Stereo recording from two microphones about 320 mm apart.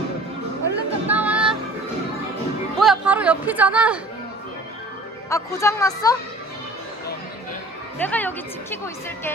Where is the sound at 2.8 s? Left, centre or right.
Centre.